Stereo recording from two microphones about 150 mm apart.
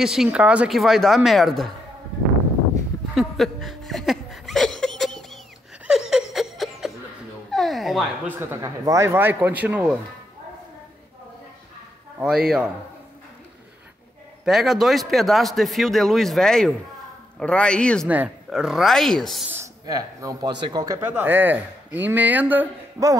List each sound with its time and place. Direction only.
0.0 s a man's voice: 5° right (ahead or behind)
3.2 s chuckle: centre (ahead or behind)
5.9 s laughter: 5° right (ahead or behind)
7.5 s a sound: centre (ahead or behind)
8.4 s speech: 20° right (ahead or behind)
12.2 s a man's voice: 5° right (ahead or behind)
14.4 s a man's voice: 5° right (ahead or behind)
18.0 s a man's voice: 10° right (ahead or behind)
19.5 s speech: 20° right (ahead or behind)
21.1 s speech: 15° right (ahead or behind)